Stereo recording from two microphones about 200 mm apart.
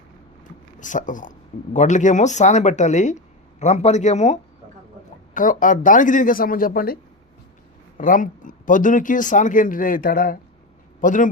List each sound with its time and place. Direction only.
0.8 s speech: 40° left (ahead or behind)